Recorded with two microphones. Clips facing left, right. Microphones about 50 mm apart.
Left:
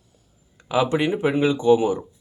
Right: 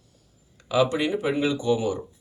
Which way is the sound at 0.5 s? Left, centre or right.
Left.